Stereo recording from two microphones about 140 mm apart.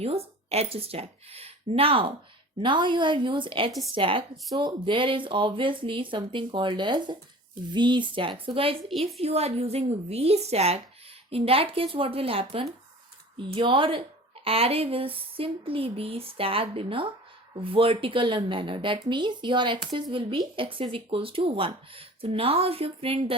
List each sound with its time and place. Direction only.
0.0 s speech: 45° right (ahead or behind)